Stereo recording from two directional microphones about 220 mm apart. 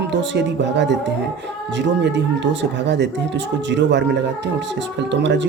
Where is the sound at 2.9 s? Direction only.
50° right (ahead or behind).